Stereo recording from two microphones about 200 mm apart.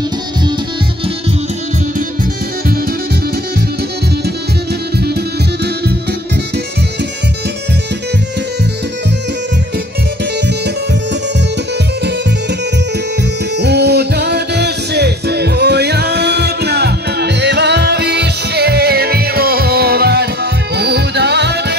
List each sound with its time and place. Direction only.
13.6 s music: 55° right (ahead or behind)